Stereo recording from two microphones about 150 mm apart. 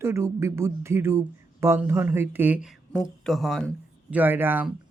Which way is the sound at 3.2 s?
Centre (ahead or behind).